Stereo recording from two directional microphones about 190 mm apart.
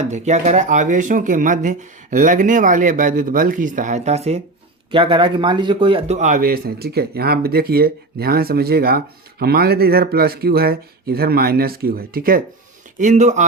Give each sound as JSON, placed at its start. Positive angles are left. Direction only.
{"t": 0.1, "sound": "speech", "side_deg": -35}
{"t": 13.0, "sound": "speech", "side_deg": -40}